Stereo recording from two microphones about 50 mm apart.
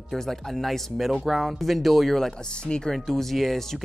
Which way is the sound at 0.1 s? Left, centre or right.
Centre.